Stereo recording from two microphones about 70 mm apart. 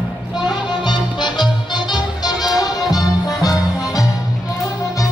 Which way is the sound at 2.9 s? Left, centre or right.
Left.